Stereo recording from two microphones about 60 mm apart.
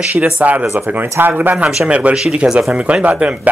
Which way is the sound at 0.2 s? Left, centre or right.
Right.